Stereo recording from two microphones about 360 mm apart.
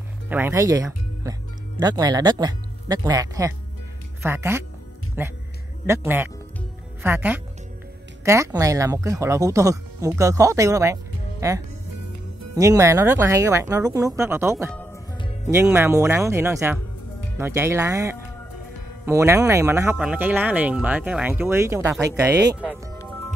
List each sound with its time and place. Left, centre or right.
0.3 s a woman's voice: centre
12.1 s music: right
12.5 s speech: centre
14.7 s music: centre
15.5 s speech: centre